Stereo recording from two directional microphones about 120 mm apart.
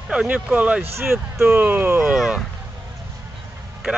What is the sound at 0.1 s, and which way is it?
Speech, 10° right (ahead or behind).